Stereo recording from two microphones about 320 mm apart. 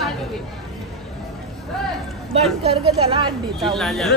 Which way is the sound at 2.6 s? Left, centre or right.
Centre.